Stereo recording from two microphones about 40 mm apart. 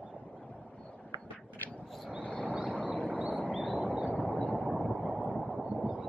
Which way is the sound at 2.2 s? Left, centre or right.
Left.